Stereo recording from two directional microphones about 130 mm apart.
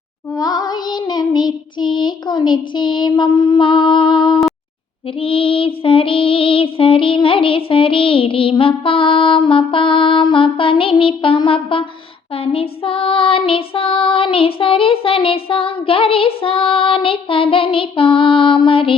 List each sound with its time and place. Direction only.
0.3 s child singing: 30° left (ahead or behind)
5.2 s music: 45° left (ahead or behind)